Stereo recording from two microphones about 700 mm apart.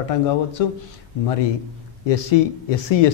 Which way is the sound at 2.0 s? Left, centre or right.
Left.